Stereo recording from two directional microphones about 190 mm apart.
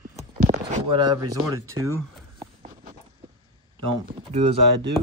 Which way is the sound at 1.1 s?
15° right (ahead or behind).